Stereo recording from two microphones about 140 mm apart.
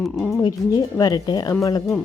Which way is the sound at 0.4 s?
30° left (ahead or behind).